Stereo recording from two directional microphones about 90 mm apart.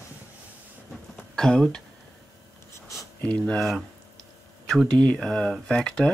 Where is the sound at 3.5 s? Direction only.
5° left (ahead or behind).